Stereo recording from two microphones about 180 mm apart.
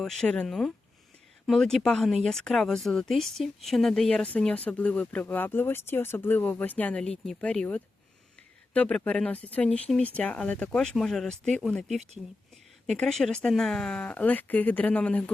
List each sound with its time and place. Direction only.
0.0 s speech: 5° left (ahead or behind)